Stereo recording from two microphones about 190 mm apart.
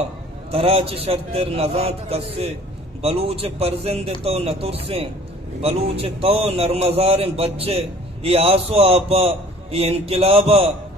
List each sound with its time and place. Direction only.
0.5 s a man's voice: 30° right (ahead or behind)